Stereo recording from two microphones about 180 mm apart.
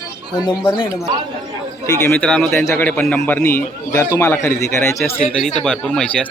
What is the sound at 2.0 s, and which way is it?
A man's voice, 5° left (ahead or behind).